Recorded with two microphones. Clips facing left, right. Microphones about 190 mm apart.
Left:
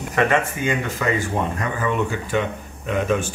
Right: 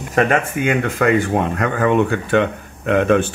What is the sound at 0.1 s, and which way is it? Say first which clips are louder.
Speech: right 3 dB; 55° right (ahead or behind).